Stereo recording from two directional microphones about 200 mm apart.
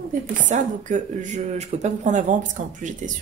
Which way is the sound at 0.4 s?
40° right (ahead or behind).